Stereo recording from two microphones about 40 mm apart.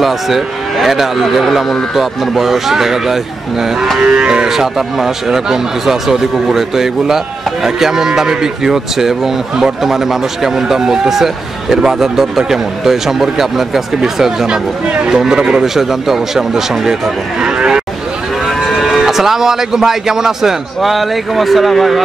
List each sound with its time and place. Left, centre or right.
0.0 s speech: centre
4.5 s speech: centre
15.6 s speech: centre
17.4 s cattle: right
18.9 s speech: centre